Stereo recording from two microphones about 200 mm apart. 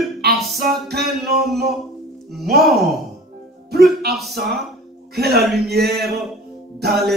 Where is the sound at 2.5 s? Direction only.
Centre (ahead or behind).